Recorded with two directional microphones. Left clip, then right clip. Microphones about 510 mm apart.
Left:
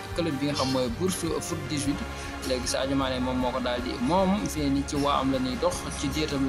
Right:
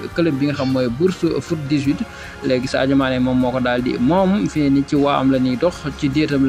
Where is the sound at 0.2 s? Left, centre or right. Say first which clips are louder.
Right 9 dB; left.